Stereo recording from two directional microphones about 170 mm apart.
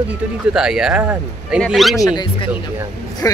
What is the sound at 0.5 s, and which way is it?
Speech, 5° right (ahead or behind).